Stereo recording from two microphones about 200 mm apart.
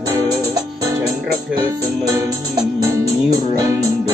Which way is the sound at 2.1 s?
15° right (ahead or behind).